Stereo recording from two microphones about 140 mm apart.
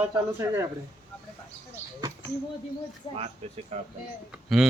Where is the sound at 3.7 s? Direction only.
50° right (ahead or behind).